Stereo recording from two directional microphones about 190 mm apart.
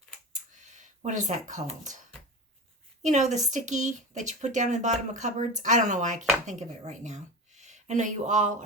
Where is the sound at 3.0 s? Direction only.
40° right (ahead or behind).